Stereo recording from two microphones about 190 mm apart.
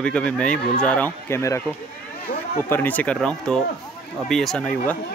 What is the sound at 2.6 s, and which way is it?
Speech, 10° left (ahead or behind).